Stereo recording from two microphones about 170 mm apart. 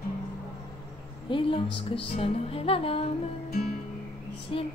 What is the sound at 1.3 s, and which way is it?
Speech, 30° left (ahead or behind).